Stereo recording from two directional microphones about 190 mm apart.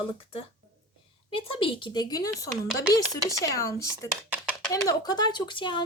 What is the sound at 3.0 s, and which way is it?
Speech, 20° right (ahead or behind).